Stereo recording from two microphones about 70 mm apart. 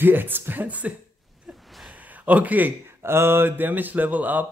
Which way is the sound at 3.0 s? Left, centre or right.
Right.